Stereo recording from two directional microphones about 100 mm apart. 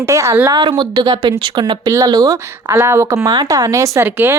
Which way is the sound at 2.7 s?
25° right (ahead or behind).